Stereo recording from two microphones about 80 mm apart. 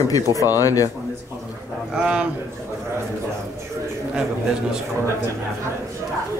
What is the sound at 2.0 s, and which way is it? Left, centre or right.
Speech, centre.